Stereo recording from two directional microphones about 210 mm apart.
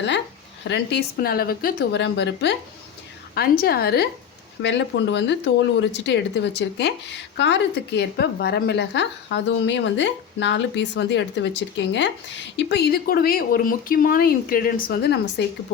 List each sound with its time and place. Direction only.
0.7 s speech: 50° left (ahead or behind)